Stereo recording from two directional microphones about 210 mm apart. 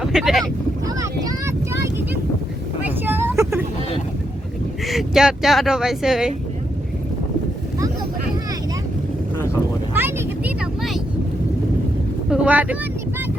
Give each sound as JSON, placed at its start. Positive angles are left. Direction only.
{"t": 0.0, "sound": "speech", "side_deg": 0}
{"t": 0.9, "sound": "vehicle", "side_deg": -15}
{"t": 3.1, "sound": "vehicle", "side_deg": -10}
{"t": 4.9, "sound": "speech", "side_deg": 0}
{"t": 9.9, "sound": "vehicle", "side_deg": -10}
{"t": 12.3, "sound": "speech", "side_deg": -5}